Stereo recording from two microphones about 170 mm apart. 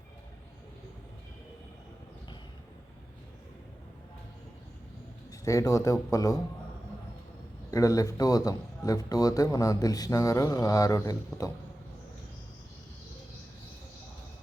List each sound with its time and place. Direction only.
5.3 s a man's voice: 20° left (ahead or behind)
7.7 s a man's voice: 20° left (ahead or behind)